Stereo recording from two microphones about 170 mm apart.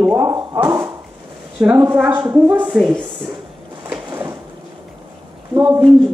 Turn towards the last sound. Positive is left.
turn(degrees=-25)  # may be behind; listen again after turning